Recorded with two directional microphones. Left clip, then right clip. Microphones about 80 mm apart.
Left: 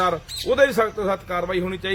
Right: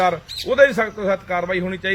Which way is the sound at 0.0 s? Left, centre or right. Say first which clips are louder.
Right 3 dB; left.